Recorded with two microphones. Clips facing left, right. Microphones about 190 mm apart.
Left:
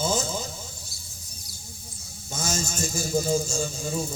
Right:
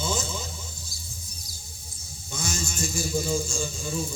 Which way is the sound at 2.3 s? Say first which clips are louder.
Left 3 dB; 40° left (ahead or behind).